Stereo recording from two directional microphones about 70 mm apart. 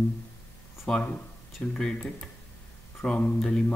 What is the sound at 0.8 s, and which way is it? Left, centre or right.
Speech, centre.